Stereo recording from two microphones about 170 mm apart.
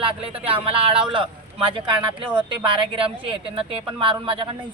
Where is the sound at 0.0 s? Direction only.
35° right (ahead or behind).